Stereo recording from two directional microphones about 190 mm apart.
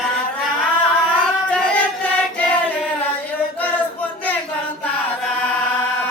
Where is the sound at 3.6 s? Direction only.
10° left (ahead or behind).